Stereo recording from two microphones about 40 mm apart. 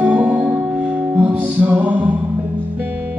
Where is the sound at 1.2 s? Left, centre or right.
Right.